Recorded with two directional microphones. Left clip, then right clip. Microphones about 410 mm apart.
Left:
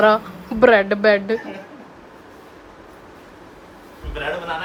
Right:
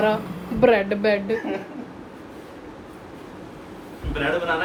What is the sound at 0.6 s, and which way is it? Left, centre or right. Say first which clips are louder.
Speech: left 5 dB; centre.